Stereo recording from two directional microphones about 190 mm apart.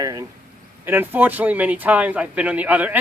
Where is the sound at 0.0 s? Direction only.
20° right (ahead or behind).